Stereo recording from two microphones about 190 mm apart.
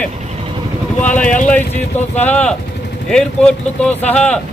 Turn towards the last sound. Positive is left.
turn(degrees=5)  # may be behind; listen again after turning